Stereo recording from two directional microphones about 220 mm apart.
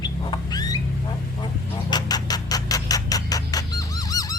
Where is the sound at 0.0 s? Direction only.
20° left (ahead or behind).